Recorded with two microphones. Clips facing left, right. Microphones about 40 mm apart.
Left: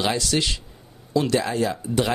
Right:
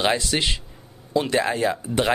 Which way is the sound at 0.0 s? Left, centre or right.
Right.